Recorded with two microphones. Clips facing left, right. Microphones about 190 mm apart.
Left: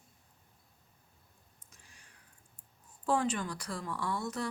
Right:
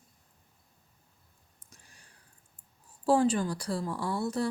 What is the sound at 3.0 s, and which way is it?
A woman's voice, 30° right (ahead or behind).